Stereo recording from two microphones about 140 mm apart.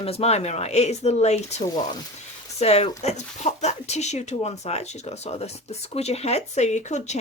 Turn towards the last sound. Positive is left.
turn(degrees=55)  # may be behind; listen again after turning